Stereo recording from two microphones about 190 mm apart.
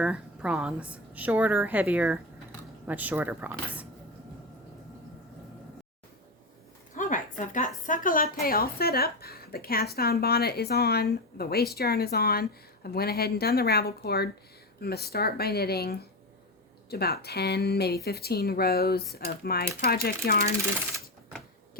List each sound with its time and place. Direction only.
0.0 s a woman's voice: 5° right (ahead or behind)
6.9 s a sound: 40° left (ahead or behind)
7.9 s a woman's voice: 45° left (ahead or behind)